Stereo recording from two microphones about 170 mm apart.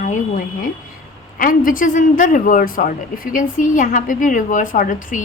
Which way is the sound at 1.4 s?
55° left (ahead or behind).